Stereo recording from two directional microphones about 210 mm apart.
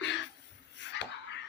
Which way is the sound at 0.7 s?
55° left (ahead or behind).